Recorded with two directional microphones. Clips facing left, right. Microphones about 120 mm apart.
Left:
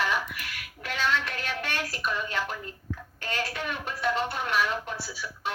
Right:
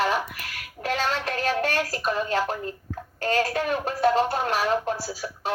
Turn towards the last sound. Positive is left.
turn(degrees=-35)  # may be behind; listen again after turning